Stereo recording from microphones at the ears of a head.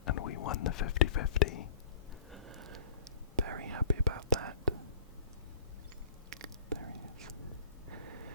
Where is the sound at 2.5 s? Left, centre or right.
Right.